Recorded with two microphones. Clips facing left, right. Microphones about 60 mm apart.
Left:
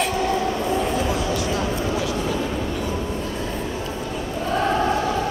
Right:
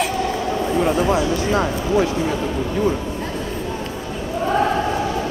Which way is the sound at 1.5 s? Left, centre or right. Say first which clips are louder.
Right 5 dB; right.